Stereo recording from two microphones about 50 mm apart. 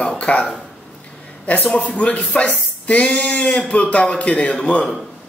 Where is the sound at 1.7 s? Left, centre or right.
Left.